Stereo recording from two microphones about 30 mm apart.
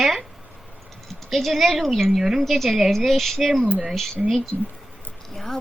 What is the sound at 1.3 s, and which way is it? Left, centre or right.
A woman's voice, centre.